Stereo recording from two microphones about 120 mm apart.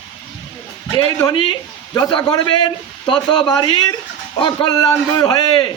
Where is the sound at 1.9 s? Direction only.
35° left (ahead or behind).